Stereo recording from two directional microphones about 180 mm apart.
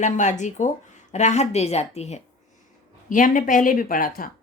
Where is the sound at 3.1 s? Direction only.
50° left (ahead or behind).